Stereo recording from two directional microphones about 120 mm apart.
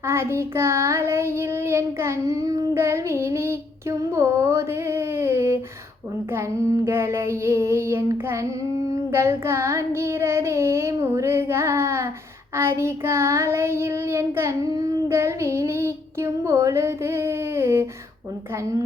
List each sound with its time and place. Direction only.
0.1 s child singing: 20° right (ahead or behind)
6.8 s child singing: 20° right (ahead or behind)